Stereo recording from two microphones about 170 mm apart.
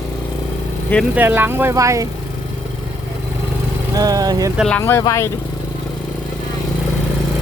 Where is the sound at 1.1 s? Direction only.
10° right (ahead or behind).